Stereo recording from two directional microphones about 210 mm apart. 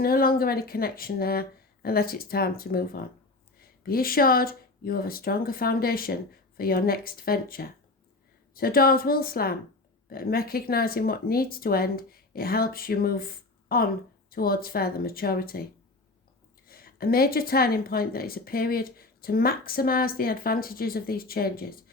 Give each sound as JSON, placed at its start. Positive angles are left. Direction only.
{"t": 0.0, "sound": "a woman's voice", "side_deg": 45}
{"t": 16.6, "sound": "a woman's voice", "side_deg": 45}